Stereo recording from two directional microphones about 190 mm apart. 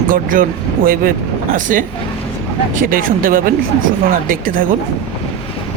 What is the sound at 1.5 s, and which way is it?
Speech, 45° right (ahead or behind).